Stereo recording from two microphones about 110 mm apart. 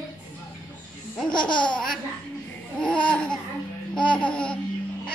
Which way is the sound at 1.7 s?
5° left (ahead or behind).